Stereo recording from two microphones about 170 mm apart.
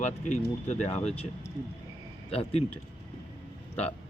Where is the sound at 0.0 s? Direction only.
45° left (ahead or behind).